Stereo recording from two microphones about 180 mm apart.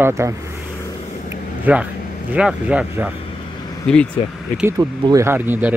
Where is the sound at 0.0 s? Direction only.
15° right (ahead or behind).